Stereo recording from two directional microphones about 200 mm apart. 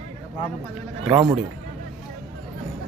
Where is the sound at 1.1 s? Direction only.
20° right (ahead or behind).